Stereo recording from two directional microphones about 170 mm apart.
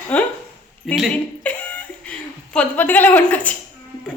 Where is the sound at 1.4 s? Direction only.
10° left (ahead or behind).